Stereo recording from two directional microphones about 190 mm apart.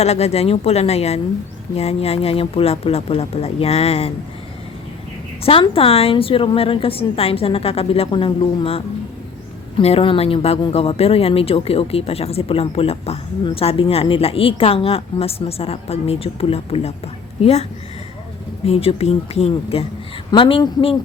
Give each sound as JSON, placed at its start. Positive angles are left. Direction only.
{"t": 0.0, "sound": "speech", "side_deg": 35}
{"t": 5.4, "sound": "a woman's voice", "side_deg": 30}
{"t": 9.8, "sound": "a woman's voice", "side_deg": 30}